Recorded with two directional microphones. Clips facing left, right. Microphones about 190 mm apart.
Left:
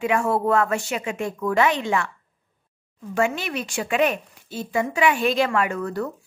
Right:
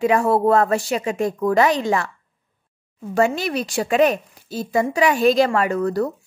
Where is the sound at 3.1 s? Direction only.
35° right (ahead or behind).